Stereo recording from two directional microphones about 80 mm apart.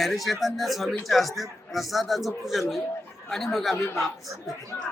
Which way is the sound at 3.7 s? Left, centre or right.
Left.